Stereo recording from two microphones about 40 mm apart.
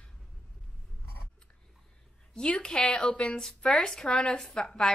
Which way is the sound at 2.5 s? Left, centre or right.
Left.